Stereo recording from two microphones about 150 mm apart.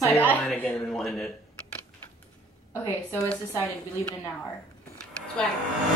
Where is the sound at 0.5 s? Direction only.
5° left (ahead or behind).